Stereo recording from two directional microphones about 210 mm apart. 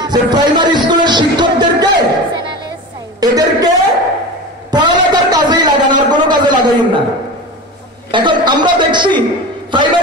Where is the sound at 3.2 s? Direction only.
20° right (ahead or behind).